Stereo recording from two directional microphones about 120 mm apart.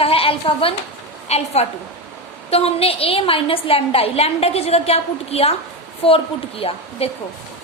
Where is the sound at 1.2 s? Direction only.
60° left (ahead or behind).